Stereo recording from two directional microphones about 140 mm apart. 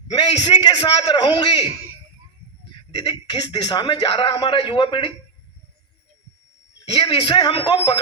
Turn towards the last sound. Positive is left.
turn(degrees=35)  # may be behind; listen again after turning